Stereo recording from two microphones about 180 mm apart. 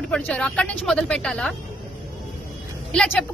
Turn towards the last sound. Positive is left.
turn(degrees=5)  # may be behind; listen again after turning